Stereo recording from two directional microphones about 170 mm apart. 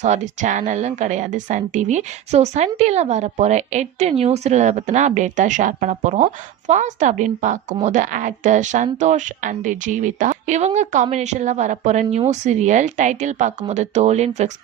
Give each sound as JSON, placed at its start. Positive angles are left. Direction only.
{"t": 0.0, "sound": "a woman's voice", "side_deg": -45}